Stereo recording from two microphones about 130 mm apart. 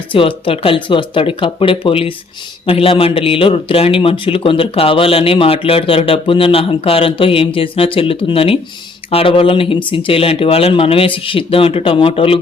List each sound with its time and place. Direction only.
0.1 s speech: 45° left (ahead or behind)